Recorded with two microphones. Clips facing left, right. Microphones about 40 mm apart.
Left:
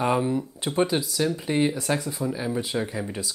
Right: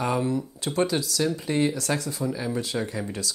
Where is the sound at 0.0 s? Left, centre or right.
Left.